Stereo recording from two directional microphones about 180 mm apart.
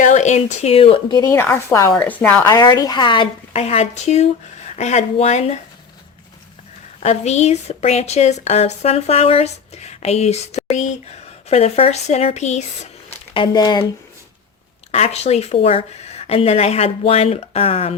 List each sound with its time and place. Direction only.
0.0 s a woman's voice: 40° left (ahead or behind)
7.0 s a woman's voice: 40° left (ahead or behind); by 13.8 s 20° left (ahead or behind)
14.9 s a woman's voice: 35° left (ahead or behind)